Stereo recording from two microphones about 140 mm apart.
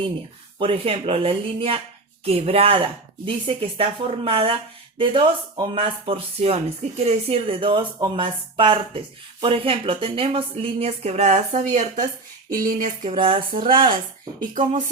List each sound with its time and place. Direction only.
0.6 s speech: 40° right (ahead or behind); by 12.0 s 60° right (ahead or behind)
12.5 s a sound: 75° right (ahead or behind)
13.1 s speech: 40° right (ahead or behind)
14.5 s speech: 65° right (ahead or behind)